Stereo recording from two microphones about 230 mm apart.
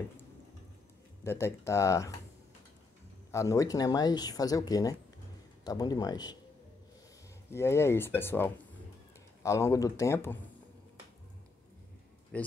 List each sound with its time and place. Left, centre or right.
1.2 s speech: centre
3.3 s speech: centre
7.5 s speech: centre
12.3 s speech: centre